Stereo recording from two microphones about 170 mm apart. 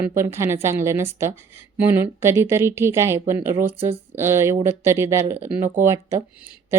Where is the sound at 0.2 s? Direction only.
15° right (ahead or behind).